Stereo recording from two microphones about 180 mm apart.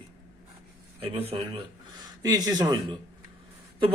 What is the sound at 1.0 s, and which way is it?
A man's voice, 35° right (ahead or behind).